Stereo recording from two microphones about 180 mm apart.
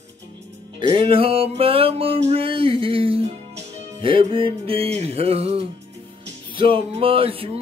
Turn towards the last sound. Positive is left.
turn(degrees=-30)  # may be behind; listen again after turning